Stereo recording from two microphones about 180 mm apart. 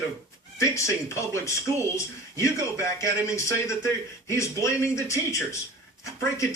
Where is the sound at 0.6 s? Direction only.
15° left (ahead or behind).